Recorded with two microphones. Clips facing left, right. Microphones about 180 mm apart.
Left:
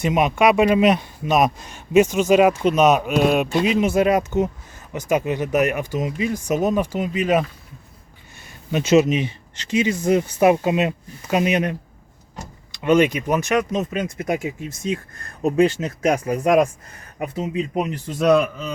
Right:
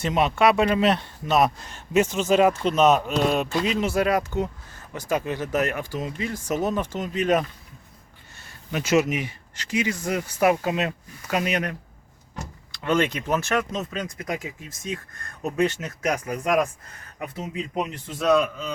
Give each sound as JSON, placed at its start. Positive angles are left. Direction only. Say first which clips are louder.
{"t": 0.0, "sound": "speech", "louder": "left 3 dB", "side_deg": 15}
{"t": 8.4, "sound": "speech", "louder": "left 6 dB", "side_deg": 20}